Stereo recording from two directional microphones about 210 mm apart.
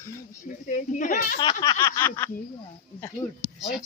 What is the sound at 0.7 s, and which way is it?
Speech, 40° left (ahead or behind).